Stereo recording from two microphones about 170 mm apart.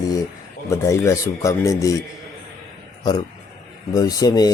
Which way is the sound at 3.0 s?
25° left (ahead or behind).